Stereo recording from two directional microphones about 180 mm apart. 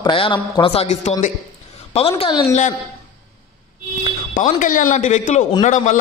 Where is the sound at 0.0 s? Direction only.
30° left (ahead or behind).